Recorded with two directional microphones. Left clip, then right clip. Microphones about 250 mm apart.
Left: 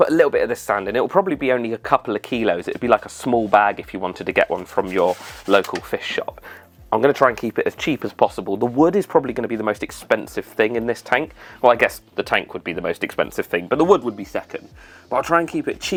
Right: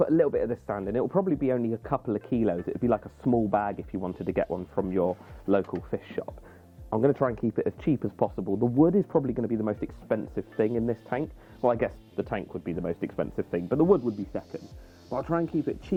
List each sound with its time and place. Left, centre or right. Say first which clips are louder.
0.0 s speech: left 8 dB; centre
8.4 s speech: left 7 dB; left
8.9 s speech: left 8 dB; centre